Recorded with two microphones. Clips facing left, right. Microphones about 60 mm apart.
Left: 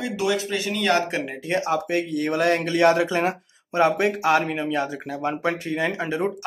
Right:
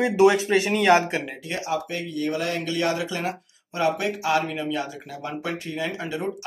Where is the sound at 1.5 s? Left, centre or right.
Left.